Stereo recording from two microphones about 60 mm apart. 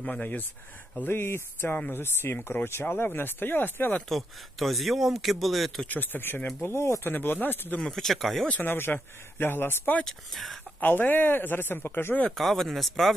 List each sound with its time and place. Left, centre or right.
0.0 s speech: left
1.0 s speech: left
4.1 s speech: centre
5.9 s speech: left
6.6 s speech: left
7.1 s speech: left
7.8 s speech: centre
8.5 s speech: left
10.0 s speech: centre
10.8 s speech: left
12.3 s speech: centre